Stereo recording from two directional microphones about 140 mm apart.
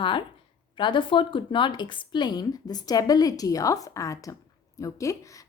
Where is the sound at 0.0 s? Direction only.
35° left (ahead or behind).